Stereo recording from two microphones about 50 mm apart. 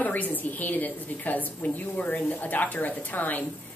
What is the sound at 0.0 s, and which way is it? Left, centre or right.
A woman's voice, left.